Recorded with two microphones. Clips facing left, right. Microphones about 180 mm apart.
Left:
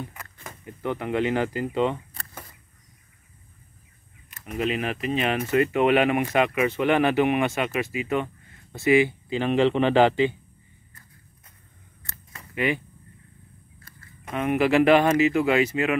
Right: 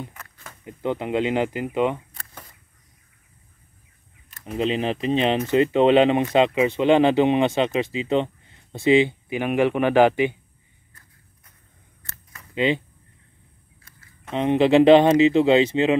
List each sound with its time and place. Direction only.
0.1 s a sound: 10° left (ahead or behind)
0.7 s speech: 20° right (ahead or behind)
4.5 s speech: 25° right (ahead or behind)
12.5 s speech: 20° right (ahead or behind)
14.3 s speech: 25° right (ahead or behind)